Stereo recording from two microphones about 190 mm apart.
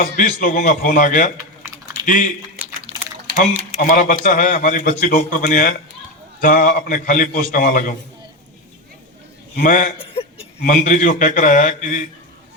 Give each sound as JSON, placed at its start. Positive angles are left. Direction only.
{"t": 0.2, "sound": "a man's voice", "side_deg": 45}
{"t": 2.9, "sound": "a sound", "side_deg": -30}
{"t": 3.8, "sound": "a man's voice", "side_deg": 45}
{"t": 9.6, "sound": "a man's voice", "side_deg": 45}
{"t": 10.0, "sound": "a man's voice", "side_deg": 30}